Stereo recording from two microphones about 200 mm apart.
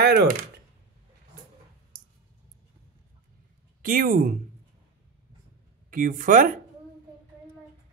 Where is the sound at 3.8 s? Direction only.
45° right (ahead or behind).